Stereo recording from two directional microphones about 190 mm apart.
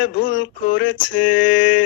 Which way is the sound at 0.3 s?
85° left.